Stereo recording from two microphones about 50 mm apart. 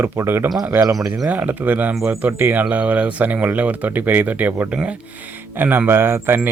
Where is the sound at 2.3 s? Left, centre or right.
Right.